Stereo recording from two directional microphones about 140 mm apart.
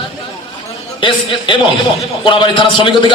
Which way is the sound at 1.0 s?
35° left (ahead or behind).